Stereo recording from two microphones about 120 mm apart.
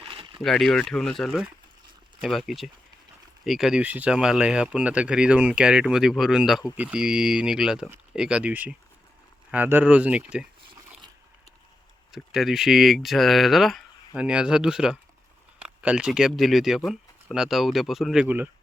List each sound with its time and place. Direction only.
0.0 s a sound: 45° right (ahead or behind)
0.4 s speech: 5° left (ahead or behind)
12.1 s speech: centre (ahead or behind)